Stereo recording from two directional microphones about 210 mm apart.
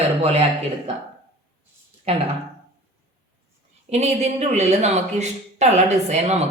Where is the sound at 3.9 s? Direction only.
30° right (ahead or behind).